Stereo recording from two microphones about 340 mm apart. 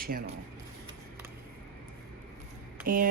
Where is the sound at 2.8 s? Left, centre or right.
Right.